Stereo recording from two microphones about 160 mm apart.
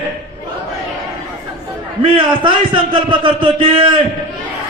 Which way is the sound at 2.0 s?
30° right (ahead or behind).